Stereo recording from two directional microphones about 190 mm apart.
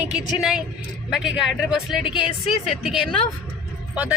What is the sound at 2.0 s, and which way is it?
Speech, 25° left (ahead or behind).